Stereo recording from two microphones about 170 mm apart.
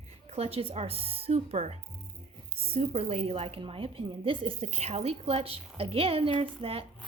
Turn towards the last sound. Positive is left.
turn(degrees=-35)  # may be behind; listen again after turning